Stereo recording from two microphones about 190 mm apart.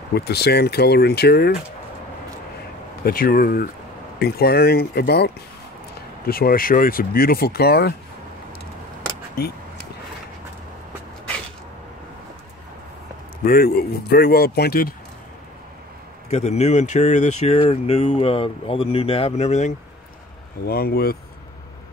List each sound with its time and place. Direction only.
0.1 s speech: 60° left (ahead or behind)
3.0 s speech: 50° left (ahead or behind)
13.4 s speech: 50° left (ahead or behind)
16.3 s speech: 35° left (ahead or behind)
20.6 s speech: 55° left (ahead or behind)